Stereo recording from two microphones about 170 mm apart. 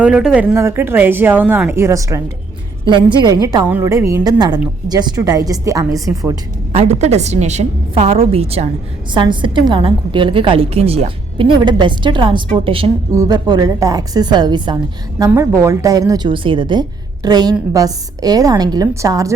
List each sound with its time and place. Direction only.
0.0 s speech: 5° right (ahead or behind)
3.4 s a woman's voice: 20° right (ahead or behind)
6.7 s a woman's voice: 40° right (ahead or behind)
15.3 s a woman's voice: 15° right (ahead or behind)